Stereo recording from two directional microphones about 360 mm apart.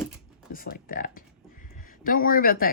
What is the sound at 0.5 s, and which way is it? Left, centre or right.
Speech, left.